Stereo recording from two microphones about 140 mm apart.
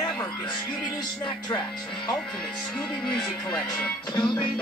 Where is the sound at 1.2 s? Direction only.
35° left (ahead or behind).